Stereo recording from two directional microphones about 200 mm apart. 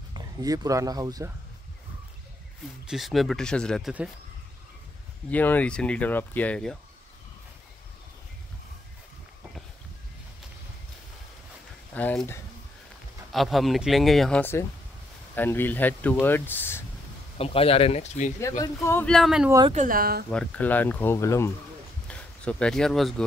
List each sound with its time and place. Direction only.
0.1 s speech: 20° right (ahead or behind)
2.9 s speech: centre (ahead or behind)
5.3 s speech: 10° left (ahead or behind)
11.9 s speech: 5° left (ahead or behind)
17.4 s speech: 30° left (ahead or behind)
18.6 s speech: 10° left (ahead or behind)
19.7 s speech: 40° right (ahead or behind)
20.2 s speech: 5° left (ahead or behind)